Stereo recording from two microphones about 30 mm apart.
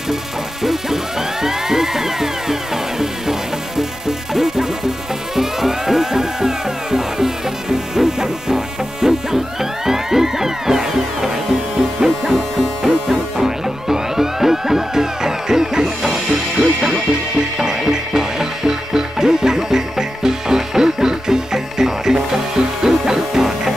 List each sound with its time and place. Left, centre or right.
0.1 s music: centre